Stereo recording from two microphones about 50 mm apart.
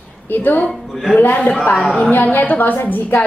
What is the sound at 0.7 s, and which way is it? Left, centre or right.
Speech, centre.